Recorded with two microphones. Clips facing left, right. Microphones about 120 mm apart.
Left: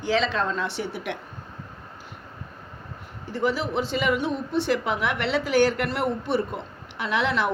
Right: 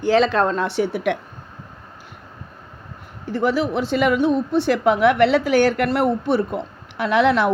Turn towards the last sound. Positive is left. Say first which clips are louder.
# right 8 dB
turn(degrees=-55)  # may be behind; listen again after turning